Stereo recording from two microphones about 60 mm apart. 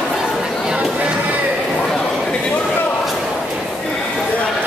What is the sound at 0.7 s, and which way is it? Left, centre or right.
Music, right.